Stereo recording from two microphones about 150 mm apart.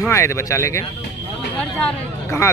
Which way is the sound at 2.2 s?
20° left (ahead or behind).